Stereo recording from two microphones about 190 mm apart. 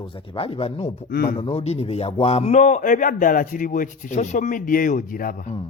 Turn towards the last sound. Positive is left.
turn(degrees=45)  # may be behind; listen again after turning